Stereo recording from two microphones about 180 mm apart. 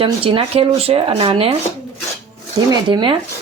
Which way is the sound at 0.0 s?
30° right (ahead or behind).